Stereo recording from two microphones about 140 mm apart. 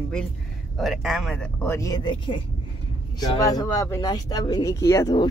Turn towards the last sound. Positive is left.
turn(degrees=20)  # may be behind; listen again after turning